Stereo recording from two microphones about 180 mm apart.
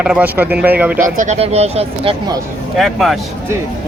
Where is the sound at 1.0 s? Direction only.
45° right (ahead or behind).